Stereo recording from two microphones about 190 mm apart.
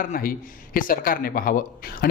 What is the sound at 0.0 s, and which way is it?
Speech, 50° left (ahead or behind).